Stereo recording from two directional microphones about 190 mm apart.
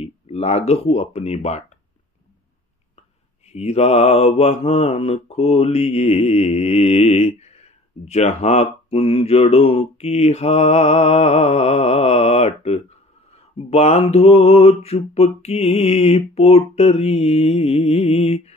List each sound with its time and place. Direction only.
0.0 s speech: 35° left (ahead or behind)
3.4 s mantra: 35° left (ahead or behind)